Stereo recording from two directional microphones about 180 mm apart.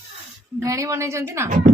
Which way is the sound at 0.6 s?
15° right (ahead or behind).